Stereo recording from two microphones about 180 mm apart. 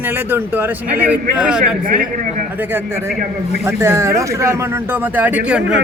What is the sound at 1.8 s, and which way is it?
Speech, 50° right (ahead or behind).